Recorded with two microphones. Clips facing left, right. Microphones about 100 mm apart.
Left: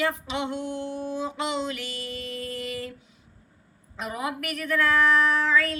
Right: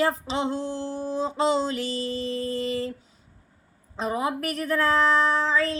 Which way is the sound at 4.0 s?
30° right (ahead or behind).